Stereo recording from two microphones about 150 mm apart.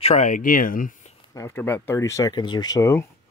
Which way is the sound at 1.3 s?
15° left (ahead or behind).